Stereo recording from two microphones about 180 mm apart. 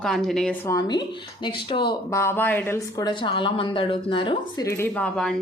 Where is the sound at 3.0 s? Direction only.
25° left (ahead or behind).